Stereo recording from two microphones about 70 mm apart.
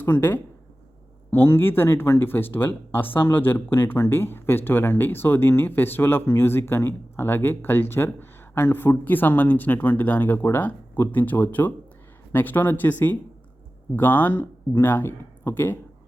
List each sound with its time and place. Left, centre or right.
0.0 s speech: left